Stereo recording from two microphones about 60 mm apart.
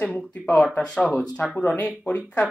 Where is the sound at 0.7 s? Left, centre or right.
Centre.